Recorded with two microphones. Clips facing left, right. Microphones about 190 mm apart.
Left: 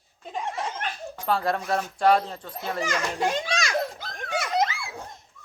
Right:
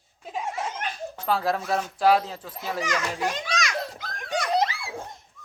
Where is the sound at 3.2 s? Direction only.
30° left (ahead or behind).